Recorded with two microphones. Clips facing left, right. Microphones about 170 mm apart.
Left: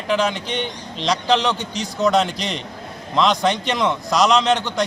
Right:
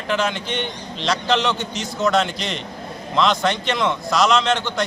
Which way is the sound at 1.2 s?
5° right (ahead or behind).